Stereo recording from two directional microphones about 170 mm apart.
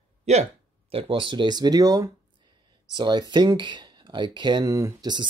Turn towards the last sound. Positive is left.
turn(degrees=-20)  # may be behind; listen again after turning